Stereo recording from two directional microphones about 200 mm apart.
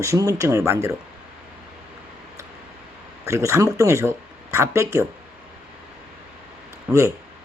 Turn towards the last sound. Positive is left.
turn(degrees=-15)  # may be behind; listen again after turning